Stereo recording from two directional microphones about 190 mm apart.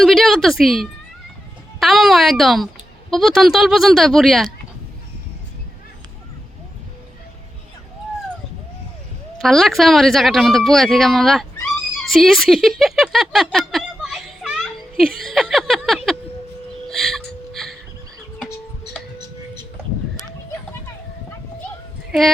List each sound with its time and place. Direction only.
0.0 s a woman's voice: centre (ahead or behind)
9.4 s speech: centre (ahead or behind)
12.6 s a sound: centre (ahead or behind)
16.9 s music: centre (ahead or behind)